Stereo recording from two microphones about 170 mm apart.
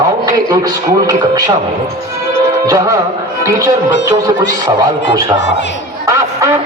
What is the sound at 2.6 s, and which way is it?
A man's voice, 20° right (ahead or behind).